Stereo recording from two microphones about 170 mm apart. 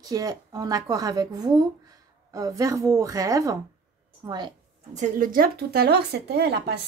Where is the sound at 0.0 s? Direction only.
20° right (ahead or behind).